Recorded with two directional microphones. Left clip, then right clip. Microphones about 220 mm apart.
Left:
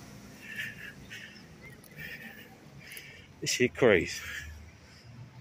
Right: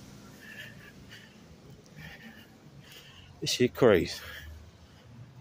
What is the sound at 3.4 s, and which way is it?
Speech, 15° right (ahead or behind).